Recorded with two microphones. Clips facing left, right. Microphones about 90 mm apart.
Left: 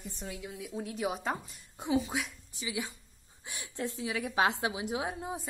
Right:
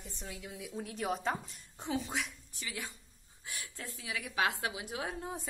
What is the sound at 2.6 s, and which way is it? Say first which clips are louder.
A woman's voice: left 6 dB; 10° left (ahead or behind).